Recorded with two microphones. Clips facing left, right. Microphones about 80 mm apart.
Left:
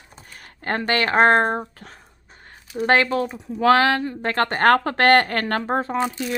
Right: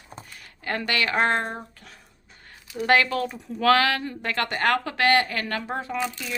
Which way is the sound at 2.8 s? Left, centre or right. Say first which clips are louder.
Left 3 dB; left.